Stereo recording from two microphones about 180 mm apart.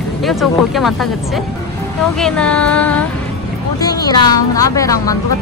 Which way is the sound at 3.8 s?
20° left (ahead or behind).